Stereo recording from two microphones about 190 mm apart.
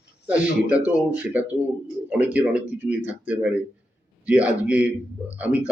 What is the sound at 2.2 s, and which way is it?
A man's voice, 10° right (ahead or behind).